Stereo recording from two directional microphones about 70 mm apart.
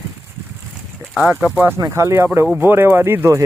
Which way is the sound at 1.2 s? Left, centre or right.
Centre.